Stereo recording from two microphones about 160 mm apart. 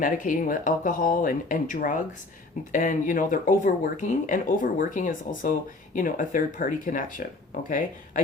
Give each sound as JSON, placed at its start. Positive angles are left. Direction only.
{"t": 0.0, "sound": "speech", "side_deg": 55}